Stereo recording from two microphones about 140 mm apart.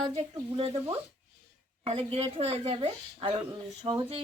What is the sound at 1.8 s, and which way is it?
A woman's voice, 45° right (ahead or behind).